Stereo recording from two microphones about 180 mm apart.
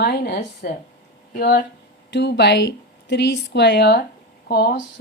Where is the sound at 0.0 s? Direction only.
60° left (ahead or behind).